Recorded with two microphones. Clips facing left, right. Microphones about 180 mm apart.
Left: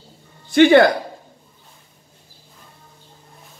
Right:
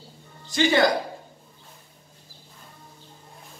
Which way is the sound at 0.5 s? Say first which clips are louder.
Left 9 dB; 60° left (ahead or behind).